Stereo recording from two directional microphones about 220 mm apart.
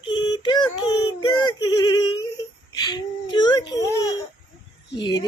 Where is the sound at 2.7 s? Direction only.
20° left (ahead or behind).